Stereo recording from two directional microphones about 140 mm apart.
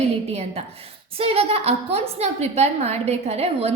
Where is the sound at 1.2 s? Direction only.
45° right (ahead or behind).